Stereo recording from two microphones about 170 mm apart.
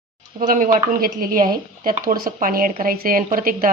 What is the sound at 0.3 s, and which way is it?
A woman's voice, 55° right (ahead or behind).